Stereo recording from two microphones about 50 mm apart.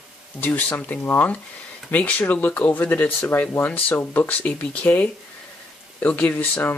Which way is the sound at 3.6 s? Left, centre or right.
Left.